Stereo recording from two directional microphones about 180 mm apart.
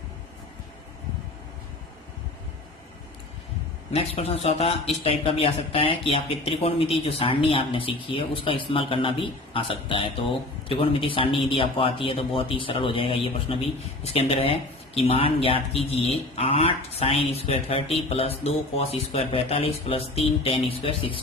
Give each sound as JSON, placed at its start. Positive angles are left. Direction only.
{"t": 3.9, "sound": "a man's voice", "side_deg": 35}